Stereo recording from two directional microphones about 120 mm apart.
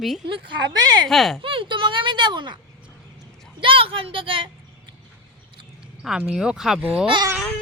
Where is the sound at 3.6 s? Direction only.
50° right (ahead or behind).